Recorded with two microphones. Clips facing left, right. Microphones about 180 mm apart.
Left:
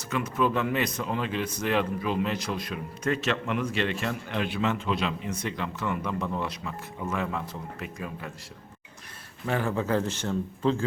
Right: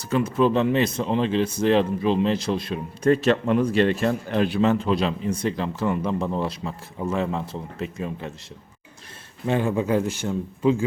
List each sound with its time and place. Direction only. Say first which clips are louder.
0.1 s speech: right 6 dB; 30° right (ahead or behind)
9.5 s speech: right 5 dB; 20° right (ahead or behind)